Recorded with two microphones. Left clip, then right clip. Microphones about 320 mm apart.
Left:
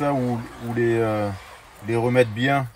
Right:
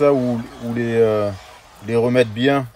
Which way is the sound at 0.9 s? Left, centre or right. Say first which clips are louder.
Right 7 dB; right.